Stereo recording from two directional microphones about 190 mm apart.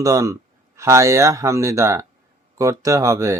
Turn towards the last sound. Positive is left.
turn(degrees=-15)  # may be behind; listen again after turning